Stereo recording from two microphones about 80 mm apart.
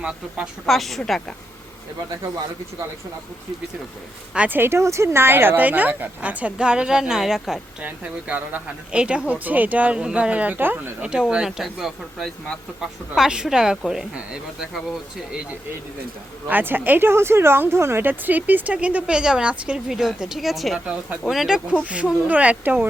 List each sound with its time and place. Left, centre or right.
0.7 s speech: centre
4.4 s speech: right; by 7.6 s centre
7.8 s speech: right
11.0 s speech: centre
16.5 s speech: right; by 20.7 s centre
20.7 s speech: centre
21.2 s speech: centre; by 22.9 s right